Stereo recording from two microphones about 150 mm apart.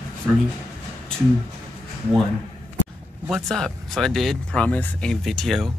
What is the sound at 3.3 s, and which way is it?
Speech, centre (ahead or behind).